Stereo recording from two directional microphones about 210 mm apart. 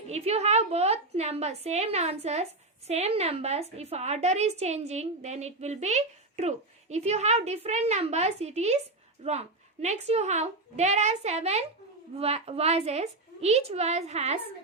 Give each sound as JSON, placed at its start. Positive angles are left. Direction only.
{"t": 0.1, "sound": "a woman's voice", "side_deg": -30}